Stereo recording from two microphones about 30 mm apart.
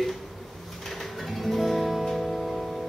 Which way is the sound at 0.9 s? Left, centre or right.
Centre.